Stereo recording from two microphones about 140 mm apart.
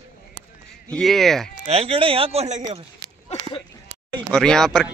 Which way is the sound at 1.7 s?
45° right (ahead or behind).